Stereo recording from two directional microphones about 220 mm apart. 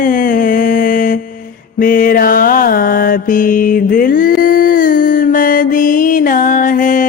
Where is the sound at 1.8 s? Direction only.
40° left (ahead or behind).